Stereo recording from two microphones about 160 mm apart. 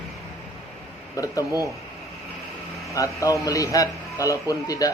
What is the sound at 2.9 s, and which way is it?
A man's voice, 20° left (ahead or behind).